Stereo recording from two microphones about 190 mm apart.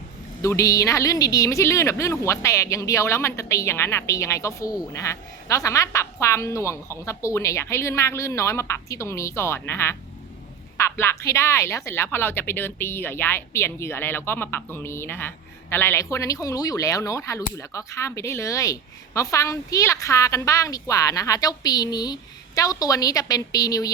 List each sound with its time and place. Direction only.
0.4 s speech: 15° left (ahead or behind)